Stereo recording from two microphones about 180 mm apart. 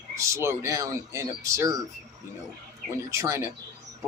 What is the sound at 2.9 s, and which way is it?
Speech, 15° right (ahead or behind).